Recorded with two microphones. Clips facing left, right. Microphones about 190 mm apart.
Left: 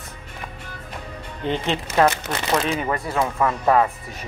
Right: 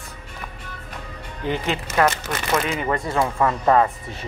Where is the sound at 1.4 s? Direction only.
20° left (ahead or behind).